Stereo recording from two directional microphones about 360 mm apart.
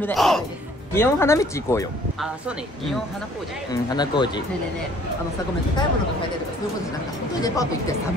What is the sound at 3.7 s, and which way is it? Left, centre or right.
Speech, centre.